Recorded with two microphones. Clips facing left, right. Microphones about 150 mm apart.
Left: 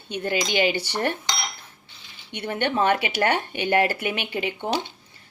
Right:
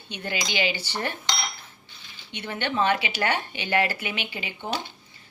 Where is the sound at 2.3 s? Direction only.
55° left (ahead or behind).